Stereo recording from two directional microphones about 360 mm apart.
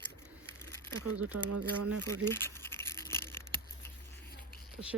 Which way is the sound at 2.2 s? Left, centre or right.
Centre.